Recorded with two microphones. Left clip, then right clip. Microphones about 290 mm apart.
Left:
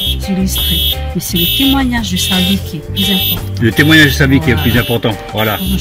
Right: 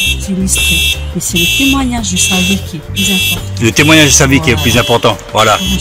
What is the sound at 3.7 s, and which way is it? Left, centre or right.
Speech, right.